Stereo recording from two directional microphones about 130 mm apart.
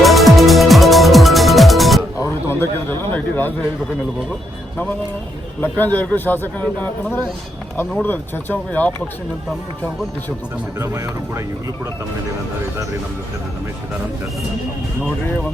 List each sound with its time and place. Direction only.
0.0 s music: centre (ahead or behind)
2.1 s a sound: 20° left (ahead or behind)
5.5 s a man's voice: 15° left (ahead or behind)
10.8 s speech: 20° right (ahead or behind)